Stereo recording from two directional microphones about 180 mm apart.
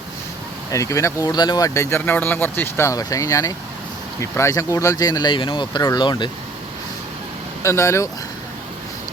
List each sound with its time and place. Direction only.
0.7 s speech: 15° left (ahead or behind)
7.6 s speech: 15° left (ahead or behind)